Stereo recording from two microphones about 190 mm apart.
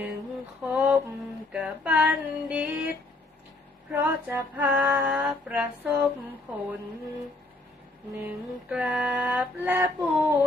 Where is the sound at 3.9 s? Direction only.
10° right (ahead or behind).